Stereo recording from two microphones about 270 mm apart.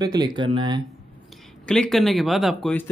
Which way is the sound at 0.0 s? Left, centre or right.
Centre.